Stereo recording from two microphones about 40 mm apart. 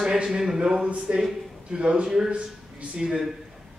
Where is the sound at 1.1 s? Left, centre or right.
Right.